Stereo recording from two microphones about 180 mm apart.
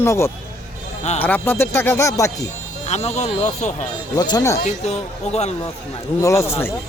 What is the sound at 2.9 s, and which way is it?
Speech, 40° left (ahead or behind).